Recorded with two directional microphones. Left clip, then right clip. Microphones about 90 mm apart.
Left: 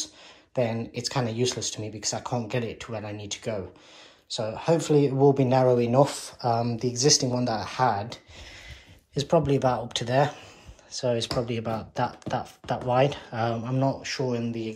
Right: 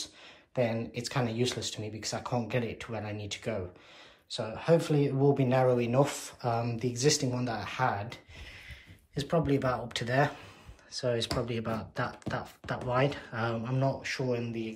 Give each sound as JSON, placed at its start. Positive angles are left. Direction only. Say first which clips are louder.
{"t": 0.6, "sound": "speech", "louder": "left 3 dB", "side_deg": 25}
{"t": 4.3, "sound": "speech", "louder": "left 2 dB", "side_deg": 35}
{"t": 6.0, "sound": "speech", "louder": "left 6 dB", "side_deg": 20}